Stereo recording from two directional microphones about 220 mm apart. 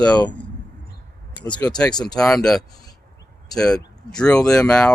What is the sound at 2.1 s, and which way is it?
Speech, 5° left (ahead or behind).